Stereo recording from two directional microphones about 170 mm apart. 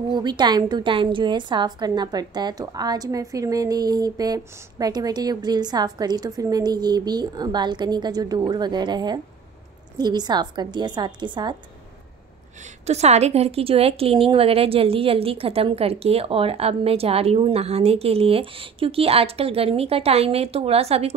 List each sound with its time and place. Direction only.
0.1 s a woman's voice: 25° right (ahead or behind)
12.8 s a woman's voice: 40° right (ahead or behind)